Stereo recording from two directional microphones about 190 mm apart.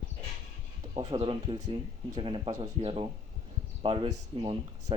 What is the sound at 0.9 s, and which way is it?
Speech, 30° right (ahead or behind).